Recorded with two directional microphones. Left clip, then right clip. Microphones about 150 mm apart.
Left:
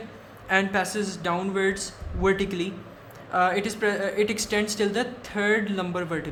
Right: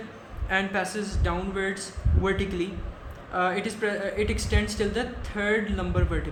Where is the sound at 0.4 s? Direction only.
35° left (ahead or behind).